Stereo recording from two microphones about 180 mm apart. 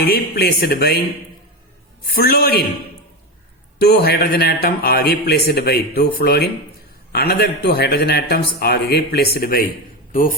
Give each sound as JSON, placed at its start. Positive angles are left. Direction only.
{"t": 0.0, "sound": "a man's voice", "side_deg": 60}
{"t": 2.0, "sound": "a man's voice", "side_deg": 60}
{"t": 3.8, "sound": "a man's voice", "side_deg": 60}